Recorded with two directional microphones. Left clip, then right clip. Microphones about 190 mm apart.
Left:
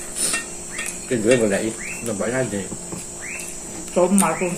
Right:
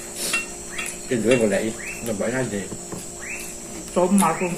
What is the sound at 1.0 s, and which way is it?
Speech, 20° left (ahead or behind).